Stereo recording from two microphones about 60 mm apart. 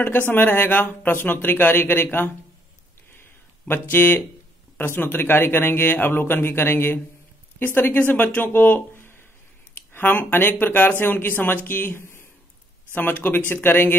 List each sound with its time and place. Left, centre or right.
0.0 s speech: left
3.2 s a sound: left
4.7 s speech: left